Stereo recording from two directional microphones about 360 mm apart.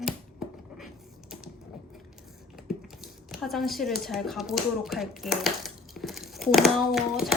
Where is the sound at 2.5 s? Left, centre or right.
Centre.